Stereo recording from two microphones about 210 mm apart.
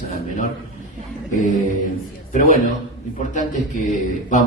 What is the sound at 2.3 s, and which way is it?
A man's voice, 40° left (ahead or behind).